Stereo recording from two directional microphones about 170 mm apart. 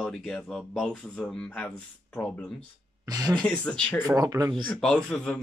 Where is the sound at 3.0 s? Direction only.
20° right (ahead or behind).